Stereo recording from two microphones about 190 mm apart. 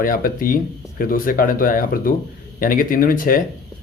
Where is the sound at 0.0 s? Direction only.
50° left (ahead or behind).